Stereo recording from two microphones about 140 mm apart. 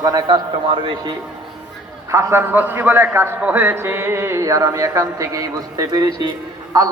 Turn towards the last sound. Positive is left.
turn(degrees=-25)  # may be behind; listen again after turning